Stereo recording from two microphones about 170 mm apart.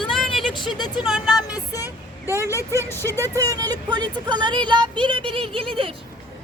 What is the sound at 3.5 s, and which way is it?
Speech, 20° right (ahead or behind).